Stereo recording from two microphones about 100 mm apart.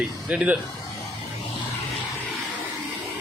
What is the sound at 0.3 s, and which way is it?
Speech, 10° right (ahead or behind).